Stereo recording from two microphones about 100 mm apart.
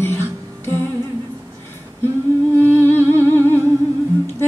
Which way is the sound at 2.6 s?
20° left (ahead or behind).